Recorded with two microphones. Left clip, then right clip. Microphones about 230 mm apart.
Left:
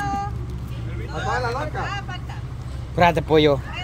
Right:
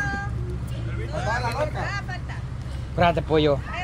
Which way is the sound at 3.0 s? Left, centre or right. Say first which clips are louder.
Left 4 dB; left.